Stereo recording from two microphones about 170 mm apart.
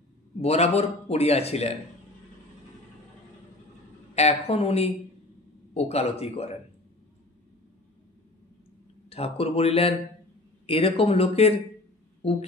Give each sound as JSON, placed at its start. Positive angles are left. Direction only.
{"t": 0.4, "sound": "a man's voice", "side_deg": 40}
{"t": 4.1, "sound": "a man's voice", "side_deg": 40}
{"t": 9.1, "sound": "a man's voice", "side_deg": 35}